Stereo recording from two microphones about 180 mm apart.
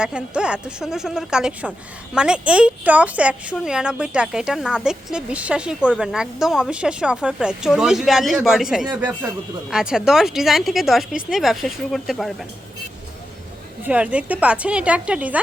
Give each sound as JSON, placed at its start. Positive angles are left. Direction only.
{"t": 0.0, "sound": "a woman's voice", "side_deg": -5}
{"t": 13.8, "sound": "a woman's voice", "side_deg": -5}